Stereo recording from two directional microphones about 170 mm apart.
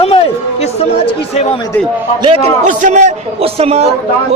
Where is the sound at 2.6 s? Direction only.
45° right (ahead or behind).